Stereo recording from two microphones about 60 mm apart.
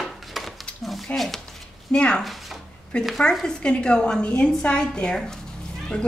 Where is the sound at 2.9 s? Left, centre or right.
Centre.